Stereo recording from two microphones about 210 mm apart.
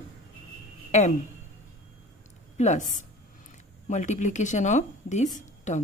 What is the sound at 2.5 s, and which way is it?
A woman's voice, 35° left (ahead or behind).